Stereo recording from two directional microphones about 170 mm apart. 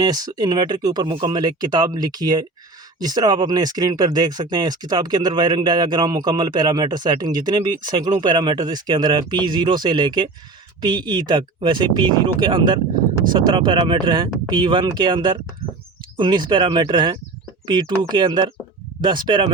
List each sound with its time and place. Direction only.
0.0 s speech: 25° right (ahead or behind)